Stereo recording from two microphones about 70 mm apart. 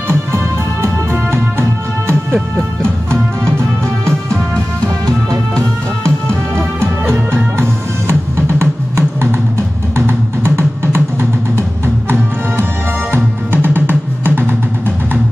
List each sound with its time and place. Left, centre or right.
1.3 s music: right
4.8 s music: right
6.0 s music: right